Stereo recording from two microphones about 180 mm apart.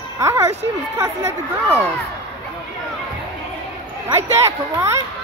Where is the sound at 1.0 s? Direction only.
15° right (ahead or behind).